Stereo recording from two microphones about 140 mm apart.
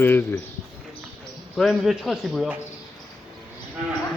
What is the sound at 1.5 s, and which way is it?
Speech, centre (ahead or behind).